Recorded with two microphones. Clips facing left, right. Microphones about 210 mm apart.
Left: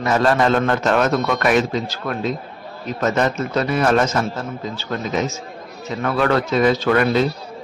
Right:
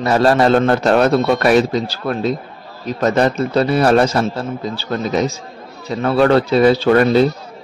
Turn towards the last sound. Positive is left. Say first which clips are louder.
# right 5 dB
turn(degrees=-35)  # may be behind; listen again after turning